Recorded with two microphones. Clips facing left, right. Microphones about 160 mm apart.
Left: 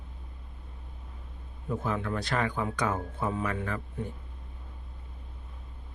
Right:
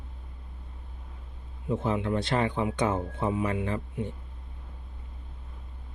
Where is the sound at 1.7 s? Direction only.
25° right (ahead or behind).